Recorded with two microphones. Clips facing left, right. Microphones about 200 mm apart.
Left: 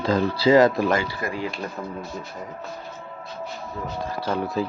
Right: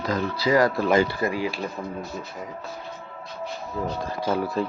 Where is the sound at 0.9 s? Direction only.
15° right (ahead or behind).